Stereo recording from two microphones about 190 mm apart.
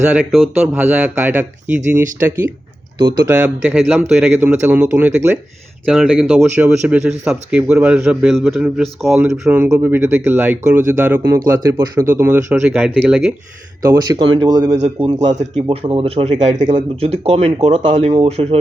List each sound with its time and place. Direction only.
0.1 s a man's voice: 5° right (ahead or behind)
3.2 s a man's voice: 5° right (ahead or behind)
11.2 s a man's voice: 20° right (ahead or behind); by 13.3 s 5° right (ahead or behind)
13.8 s speech: 20° right (ahead or behind)
14.8 s speech: 30° right (ahead or behind)